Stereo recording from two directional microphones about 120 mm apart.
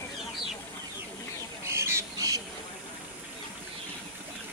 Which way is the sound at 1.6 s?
20° right (ahead or behind).